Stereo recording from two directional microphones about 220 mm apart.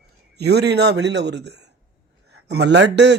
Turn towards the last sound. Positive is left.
turn(degrees=-50)  # may be behind; listen again after turning